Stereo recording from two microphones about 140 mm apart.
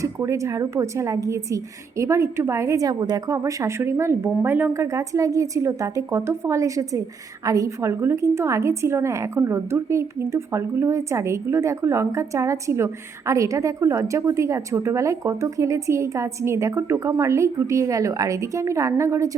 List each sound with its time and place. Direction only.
0.0 s a woman's voice: 20° right (ahead or behind)